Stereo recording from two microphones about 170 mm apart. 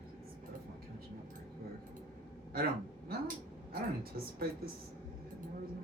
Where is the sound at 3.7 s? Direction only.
60° right (ahead or behind).